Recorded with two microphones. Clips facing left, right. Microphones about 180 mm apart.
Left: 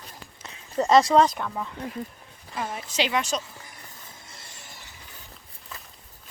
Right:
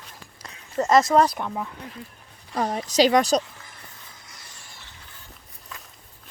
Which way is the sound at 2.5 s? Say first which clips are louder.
Right 7 dB; 40° right (ahead or behind).